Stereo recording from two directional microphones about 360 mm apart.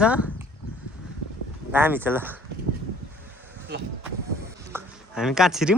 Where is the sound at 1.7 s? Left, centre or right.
Centre.